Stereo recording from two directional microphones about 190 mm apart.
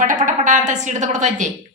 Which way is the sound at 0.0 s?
45° right (ahead or behind).